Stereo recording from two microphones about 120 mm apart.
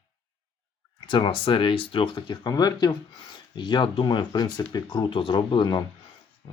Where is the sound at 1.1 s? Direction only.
45° left (ahead or behind).